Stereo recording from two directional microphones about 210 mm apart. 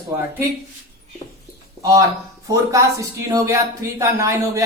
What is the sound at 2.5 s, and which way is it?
A woman's voice, 15° right (ahead or behind).